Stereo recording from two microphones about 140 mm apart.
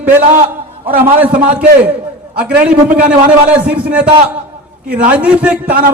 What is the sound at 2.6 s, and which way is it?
A man's voice, 10° right (ahead or behind).